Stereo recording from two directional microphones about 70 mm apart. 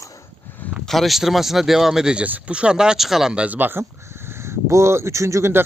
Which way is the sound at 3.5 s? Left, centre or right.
Right.